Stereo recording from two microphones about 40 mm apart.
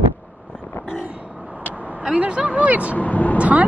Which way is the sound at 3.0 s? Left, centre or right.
Left.